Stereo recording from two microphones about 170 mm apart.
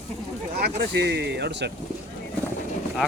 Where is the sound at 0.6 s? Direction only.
85° right.